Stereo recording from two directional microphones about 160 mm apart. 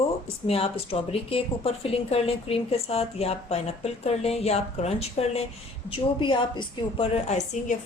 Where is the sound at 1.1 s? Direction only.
35° left (ahead or behind).